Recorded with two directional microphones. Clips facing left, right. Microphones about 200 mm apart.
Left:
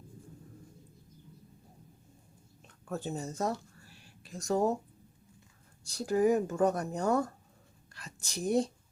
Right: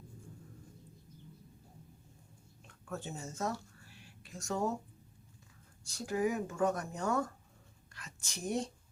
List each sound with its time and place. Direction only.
2.9 s speech: 35° left (ahead or behind)
5.8 s a woman's voice: 35° left (ahead or behind)